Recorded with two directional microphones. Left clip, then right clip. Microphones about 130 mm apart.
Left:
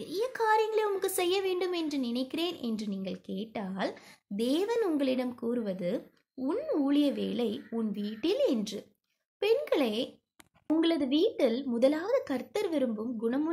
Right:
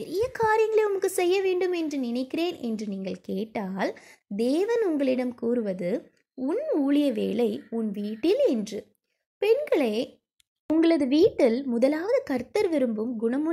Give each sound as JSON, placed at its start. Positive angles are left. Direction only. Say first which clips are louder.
{"t": 0.0, "sound": "a woman's voice", "louder": "right 5 dB", "side_deg": -40}
{"t": 6.5, "sound": "a woman's voice", "louder": "right 4 dB", "side_deg": -30}
{"t": 11.6, "sound": "a woman's voice", "louder": "right 3 dB", "side_deg": -40}